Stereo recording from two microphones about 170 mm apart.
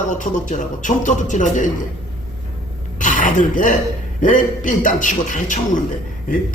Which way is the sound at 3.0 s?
50° left (ahead or behind).